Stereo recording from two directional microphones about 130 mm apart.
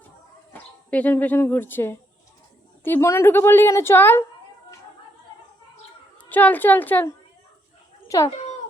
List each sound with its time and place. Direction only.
0.9 s a woman's voice: 10° left (ahead or behind)
6.1 s a woman's voice: 15° left (ahead or behind)
8.0 s cat: 25° left (ahead or behind)